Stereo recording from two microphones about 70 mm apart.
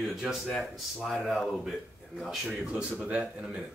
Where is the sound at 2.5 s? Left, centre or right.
Centre.